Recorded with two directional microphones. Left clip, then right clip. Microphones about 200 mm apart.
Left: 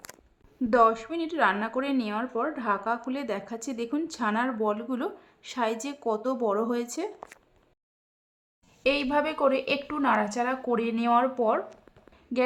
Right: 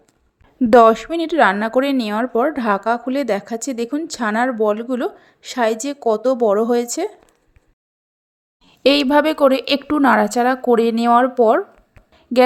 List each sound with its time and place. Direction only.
0.6 s a woman's voice: 40° right (ahead or behind)
8.8 s a woman's voice: 40° right (ahead or behind)